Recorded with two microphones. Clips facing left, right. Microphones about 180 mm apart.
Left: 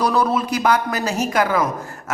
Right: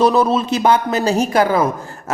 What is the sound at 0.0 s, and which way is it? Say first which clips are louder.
Speech: right 4 dB; 25° right (ahead or behind).